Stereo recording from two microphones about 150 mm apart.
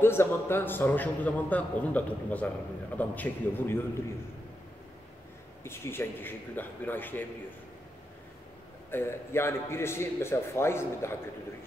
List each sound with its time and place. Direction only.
0.0 s a man's voice: 15° left (ahead or behind)
5.6 s a man's voice: 15° left (ahead or behind)
8.9 s a man's voice: 15° left (ahead or behind)